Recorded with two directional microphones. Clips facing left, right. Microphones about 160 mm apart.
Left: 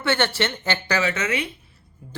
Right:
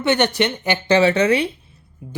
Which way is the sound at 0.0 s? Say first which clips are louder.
Right 5 dB; 20° right (ahead or behind).